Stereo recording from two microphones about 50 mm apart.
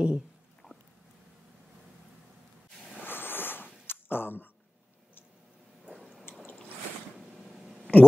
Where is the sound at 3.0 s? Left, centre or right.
Left.